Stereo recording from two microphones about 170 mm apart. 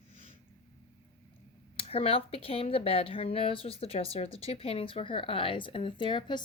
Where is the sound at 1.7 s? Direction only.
35° left (ahead or behind).